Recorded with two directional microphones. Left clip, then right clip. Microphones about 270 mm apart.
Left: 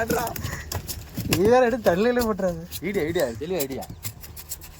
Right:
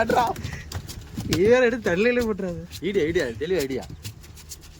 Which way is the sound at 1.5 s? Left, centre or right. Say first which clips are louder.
Even; centre.